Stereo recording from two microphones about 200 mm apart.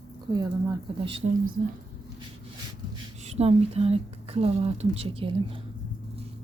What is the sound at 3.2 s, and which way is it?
Speech, 30° right (ahead or behind).